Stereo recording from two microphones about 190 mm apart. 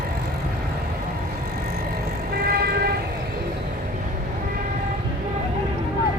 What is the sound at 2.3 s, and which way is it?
Vehicle, 55° right (ahead or behind).